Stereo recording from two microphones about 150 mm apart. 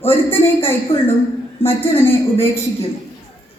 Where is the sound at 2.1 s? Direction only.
15° left (ahead or behind).